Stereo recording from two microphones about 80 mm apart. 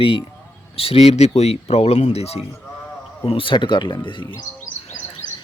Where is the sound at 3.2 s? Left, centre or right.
Left.